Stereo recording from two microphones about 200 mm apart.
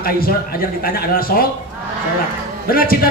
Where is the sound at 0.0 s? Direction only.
45° left (ahead or behind).